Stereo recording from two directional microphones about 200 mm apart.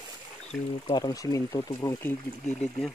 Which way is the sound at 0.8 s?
20° left (ahead or behind).